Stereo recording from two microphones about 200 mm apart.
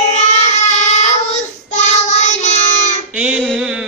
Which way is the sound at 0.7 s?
35° left (ahead or behind).